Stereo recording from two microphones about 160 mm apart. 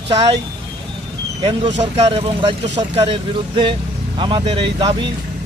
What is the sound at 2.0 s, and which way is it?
Speech, 30° right (ahead or behind).